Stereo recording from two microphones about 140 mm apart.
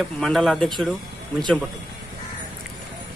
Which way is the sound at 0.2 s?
5° left (ahead or behind).